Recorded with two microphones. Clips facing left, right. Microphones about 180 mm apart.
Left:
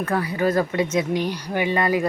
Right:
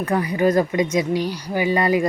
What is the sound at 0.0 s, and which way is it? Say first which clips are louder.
Speech: right 3 dB; 15° right (ahead or behind).